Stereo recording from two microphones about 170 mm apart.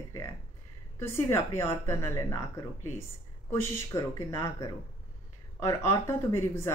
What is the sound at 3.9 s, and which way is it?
Speech, 20° left (ahead or behind).